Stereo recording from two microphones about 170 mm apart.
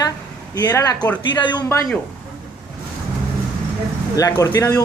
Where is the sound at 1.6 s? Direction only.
15° left (ahead or behind).